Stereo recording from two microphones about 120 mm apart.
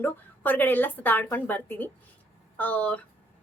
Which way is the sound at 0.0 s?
15° left (ahead or behind).